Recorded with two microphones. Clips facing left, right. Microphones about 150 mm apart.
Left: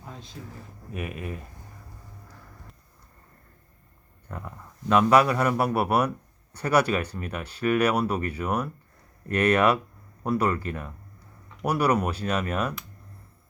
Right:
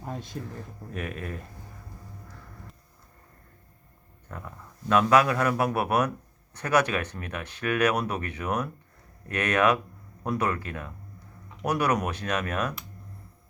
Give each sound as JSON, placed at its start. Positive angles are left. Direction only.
{"t": 0.4, "sound": "speech", "side_deg": -55}
{"t": 0.9, "sound": "speech", "side_deg": 5}
{"t": 4.3, "sound": "speech", "side_deg": 5}